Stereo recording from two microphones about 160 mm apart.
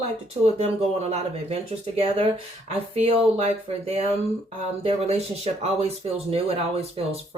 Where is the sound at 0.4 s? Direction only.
40° right (ahead or behind).